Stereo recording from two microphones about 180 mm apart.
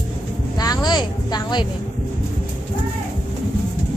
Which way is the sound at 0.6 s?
20° left (ahead or behind).